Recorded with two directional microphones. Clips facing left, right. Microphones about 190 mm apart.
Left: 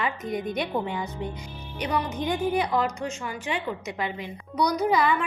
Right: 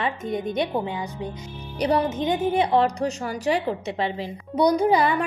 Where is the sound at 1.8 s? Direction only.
35° right (ahead or behind).